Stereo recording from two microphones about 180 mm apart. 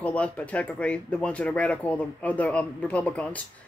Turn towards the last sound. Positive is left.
turn(degrees=5)  # may be behind; listen again after turning